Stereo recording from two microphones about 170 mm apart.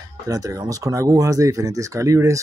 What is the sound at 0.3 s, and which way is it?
Speech, 20° right (ahead or behind).